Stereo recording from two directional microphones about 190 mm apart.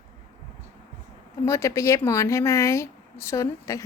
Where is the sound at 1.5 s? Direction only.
15° left (ahead or behind).